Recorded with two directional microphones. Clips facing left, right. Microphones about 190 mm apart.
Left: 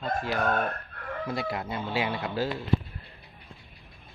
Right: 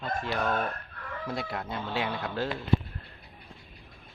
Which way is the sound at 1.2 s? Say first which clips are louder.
Left 2 dB; 5° left (ahead or behind).